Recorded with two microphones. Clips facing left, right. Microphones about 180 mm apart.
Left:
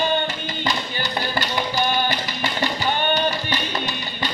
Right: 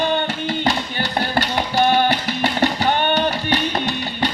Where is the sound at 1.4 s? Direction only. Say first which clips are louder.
Right 5 dB; 70° right (ahead or behind).